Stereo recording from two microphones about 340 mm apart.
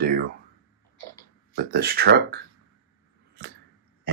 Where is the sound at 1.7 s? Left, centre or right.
Right.